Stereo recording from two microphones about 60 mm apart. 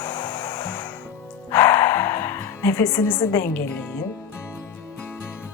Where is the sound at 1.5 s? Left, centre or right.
Left.